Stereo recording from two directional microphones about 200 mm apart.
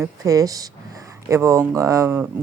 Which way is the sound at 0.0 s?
15° right (ahead or behind).